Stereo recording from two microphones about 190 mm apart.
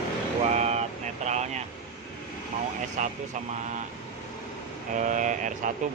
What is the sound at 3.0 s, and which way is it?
Speech, 40° right (ahead or behind).